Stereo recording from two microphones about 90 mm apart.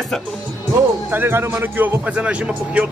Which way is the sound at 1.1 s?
25° right (ahead or behind).